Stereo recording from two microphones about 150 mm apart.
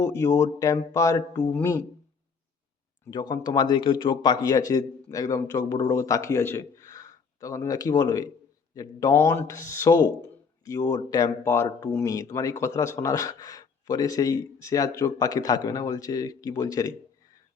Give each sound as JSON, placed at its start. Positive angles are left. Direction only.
{"t": 0.1, "sound": "speech", "side_deg": 20}
{"t": 3.1, "sound": "a man's voice", "side_deg": 30}